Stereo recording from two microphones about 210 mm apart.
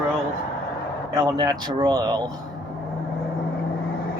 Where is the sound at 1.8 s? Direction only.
20° right (ahead or behind).